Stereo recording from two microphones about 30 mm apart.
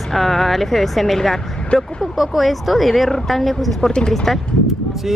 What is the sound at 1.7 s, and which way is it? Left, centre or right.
Speech, left.